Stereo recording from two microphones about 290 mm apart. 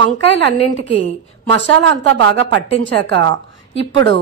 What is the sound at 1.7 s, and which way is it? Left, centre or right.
A woman's voice, right.